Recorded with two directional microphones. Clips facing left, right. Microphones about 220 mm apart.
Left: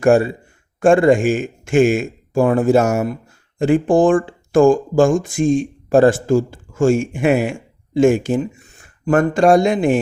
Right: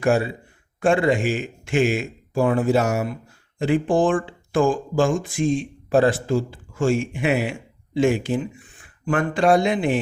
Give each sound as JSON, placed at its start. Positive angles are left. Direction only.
{"t": 0.0, "sound": "a man's voice", "side_deg": 50}